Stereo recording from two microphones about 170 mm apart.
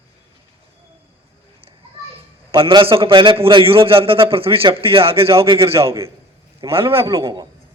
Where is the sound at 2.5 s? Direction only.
30° right (ahead or behind).